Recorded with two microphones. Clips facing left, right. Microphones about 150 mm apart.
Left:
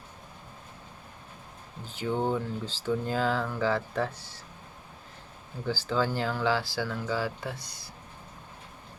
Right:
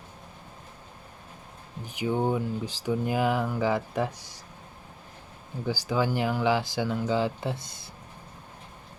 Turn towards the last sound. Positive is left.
turn(degrees=-25)  # may be behind; listen again after turning